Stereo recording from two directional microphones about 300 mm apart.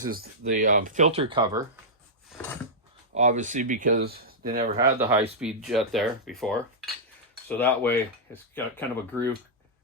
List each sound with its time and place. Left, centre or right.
0.0 s speech: right; by 1.8 s centre
3.2 s speech: right
4.8 s speech: centre
5.4 s cutlery: centre
7.4 s speech: centre